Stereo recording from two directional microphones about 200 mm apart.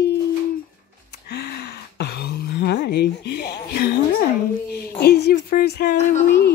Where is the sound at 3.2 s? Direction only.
55° left (ahead or behind).